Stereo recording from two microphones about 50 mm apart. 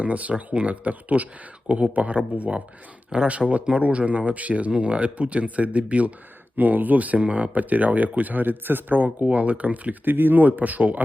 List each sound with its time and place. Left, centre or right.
0.0 s speech: right